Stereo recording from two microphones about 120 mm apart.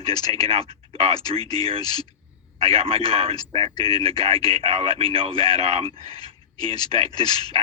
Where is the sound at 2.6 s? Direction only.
50° right (ahead or behind).